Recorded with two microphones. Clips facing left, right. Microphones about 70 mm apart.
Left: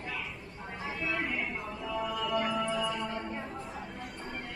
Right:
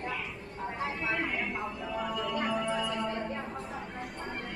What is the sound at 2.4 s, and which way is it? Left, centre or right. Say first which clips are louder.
Music: even; centre.